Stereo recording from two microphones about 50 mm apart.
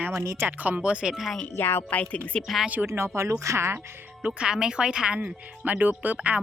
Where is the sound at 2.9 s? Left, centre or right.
Right.